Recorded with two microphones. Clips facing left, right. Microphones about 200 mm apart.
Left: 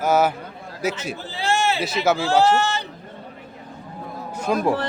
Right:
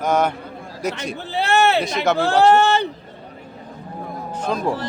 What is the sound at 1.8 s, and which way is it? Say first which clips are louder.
Speech: right 1 dB; 5° left (ahead or behind).